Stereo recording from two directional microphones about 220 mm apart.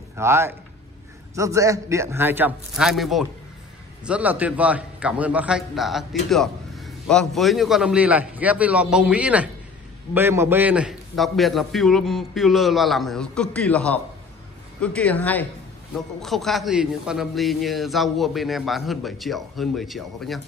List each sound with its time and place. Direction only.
0.1 s a man's voice: 10° right (ahead or behind)